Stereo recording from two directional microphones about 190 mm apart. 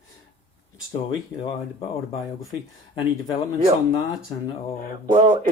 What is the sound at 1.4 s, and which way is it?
Speech, 30° left (ahead or behind).